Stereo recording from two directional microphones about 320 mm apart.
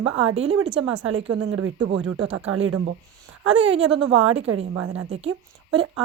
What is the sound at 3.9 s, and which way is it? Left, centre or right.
A woman's voice, right.